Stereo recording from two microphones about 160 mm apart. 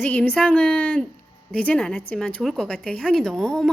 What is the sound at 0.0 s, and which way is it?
A woman's voice, 10° left (ahead or behind).